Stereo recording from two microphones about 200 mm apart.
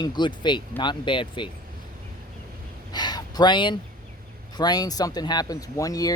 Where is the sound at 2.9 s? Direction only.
20° left (ahead or behind).